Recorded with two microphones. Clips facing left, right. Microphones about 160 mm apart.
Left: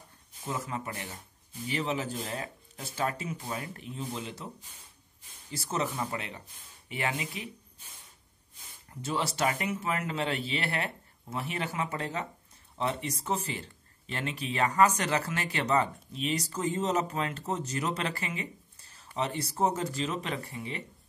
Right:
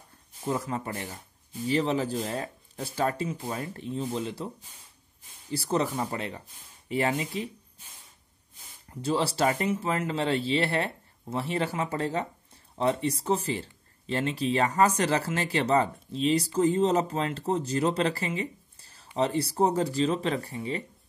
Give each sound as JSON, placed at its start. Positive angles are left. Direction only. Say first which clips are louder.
{"t": 0.5, "sound": "speech", "louder": "right 5 dB", "side_deg": -35}
{"t": 5.5, "sound": "speech", "louder": "right 5 dB", "side_deg": -35}
{"t": 9.0, "sound": "speech", "louder": "right 5 dB", "side_deg": -30}